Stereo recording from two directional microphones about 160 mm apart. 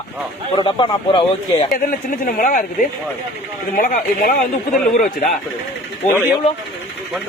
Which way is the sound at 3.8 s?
60° left (ahead or behind).